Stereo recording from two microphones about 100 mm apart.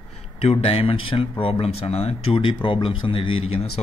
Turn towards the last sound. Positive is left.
turn(degrees=75)  # may be behind; listen again after turning